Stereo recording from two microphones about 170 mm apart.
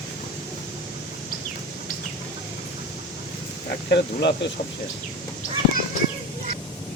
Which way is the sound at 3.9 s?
85° left.